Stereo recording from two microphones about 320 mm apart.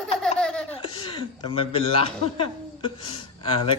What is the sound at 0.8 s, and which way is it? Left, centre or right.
Speech, centre.